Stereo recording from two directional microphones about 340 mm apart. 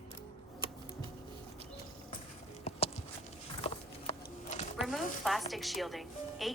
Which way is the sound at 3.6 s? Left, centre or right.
Centre.